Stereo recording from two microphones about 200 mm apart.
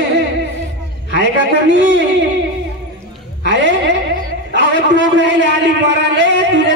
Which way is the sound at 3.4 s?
65° right (ahead or behind).